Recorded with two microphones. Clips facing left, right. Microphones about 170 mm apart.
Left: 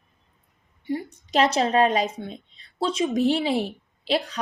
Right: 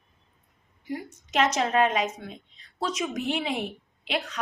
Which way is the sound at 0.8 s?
30° left (ahead or behind).